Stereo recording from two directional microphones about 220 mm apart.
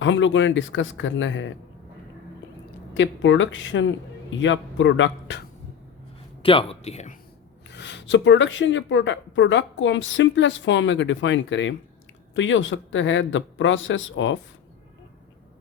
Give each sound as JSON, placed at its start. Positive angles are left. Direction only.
{"t": 0.0, "sound": "speech", "side_deg": 60}
{"t": 2.9, "sound": "speech", "side_deg": 60}
{"t": 6.4, "sound": "speech", "side_deg": 25}
{"t": 7.7, "sound": "speech", "side_deg": 50}